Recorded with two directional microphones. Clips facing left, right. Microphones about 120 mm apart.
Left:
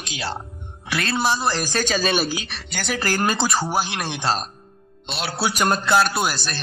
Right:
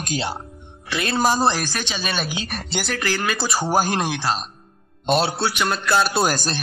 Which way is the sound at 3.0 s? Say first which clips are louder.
Left 4 dB; 40° left (ahead or behind).